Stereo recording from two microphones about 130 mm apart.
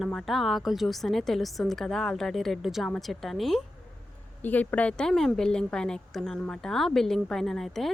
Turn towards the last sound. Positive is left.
turn(degrees=0)  # may be behind; listen again after turning